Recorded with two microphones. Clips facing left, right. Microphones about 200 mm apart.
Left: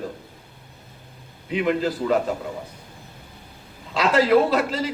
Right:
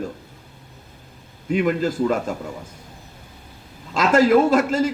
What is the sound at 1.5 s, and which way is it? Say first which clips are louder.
Speech: right 2 dB; 45° right (ahead or behind).